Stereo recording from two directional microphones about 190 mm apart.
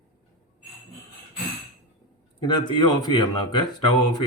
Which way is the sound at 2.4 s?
25° left (ahead or behind).